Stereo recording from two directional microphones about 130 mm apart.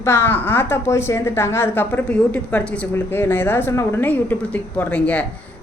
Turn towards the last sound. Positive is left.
turn(degrees=10)  # may be behind; listen again after turning